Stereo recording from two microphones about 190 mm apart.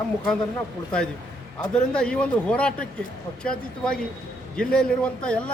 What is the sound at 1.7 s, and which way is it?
Speech, 5° left (ahead or behind).